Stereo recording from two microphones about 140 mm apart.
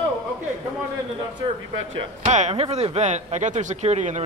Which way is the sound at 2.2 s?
55° right (ahead or behind).